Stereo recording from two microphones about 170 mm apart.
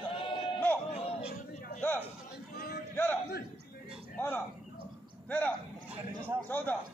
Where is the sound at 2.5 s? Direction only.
60° left (ahead or behind).